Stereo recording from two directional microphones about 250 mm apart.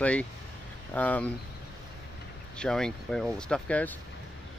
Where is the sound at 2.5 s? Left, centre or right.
Centre.